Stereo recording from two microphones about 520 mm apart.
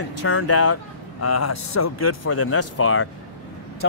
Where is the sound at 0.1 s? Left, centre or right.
Left.